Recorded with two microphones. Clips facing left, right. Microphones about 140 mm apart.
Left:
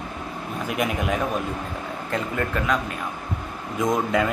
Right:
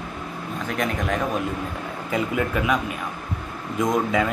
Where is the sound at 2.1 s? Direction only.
10° right (ahead or behind).